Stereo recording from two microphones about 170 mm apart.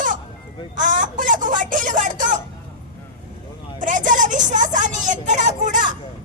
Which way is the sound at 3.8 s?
50° right (ahead or behind).